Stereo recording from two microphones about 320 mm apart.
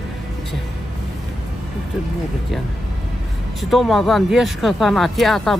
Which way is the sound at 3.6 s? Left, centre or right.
Centre.